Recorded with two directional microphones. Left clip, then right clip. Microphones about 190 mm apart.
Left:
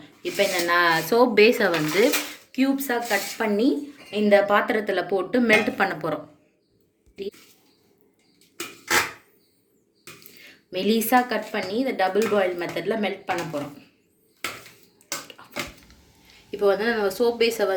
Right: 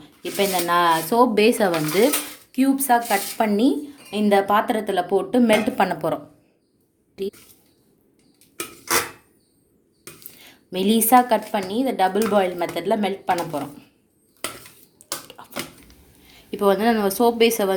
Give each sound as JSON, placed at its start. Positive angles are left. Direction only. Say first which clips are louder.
{"t": 0.0, "sound": "a woman's voice", "louder": "even", "side_deg": -55}
{"t": 10.4, "sound": "speech", "louder": "right 2 dB", "side_deg": -55}
{"t": 15.3, "sound": "a sound", "louder": "right 3 dB", "side_deg": -60}
{"t": 16.5, "sound": "a woman's voice", "louder": "right 3 dB", "side_deg": -50}